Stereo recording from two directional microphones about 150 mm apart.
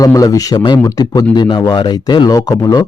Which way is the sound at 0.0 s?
20° left (ahead or behind).